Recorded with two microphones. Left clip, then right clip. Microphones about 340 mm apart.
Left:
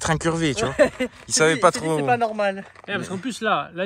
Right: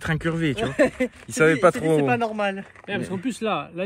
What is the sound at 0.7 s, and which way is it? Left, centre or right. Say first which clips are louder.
Speech: left 2 dB; left.